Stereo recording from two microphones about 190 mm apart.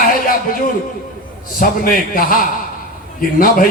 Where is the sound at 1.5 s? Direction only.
50° left (ahead or behind).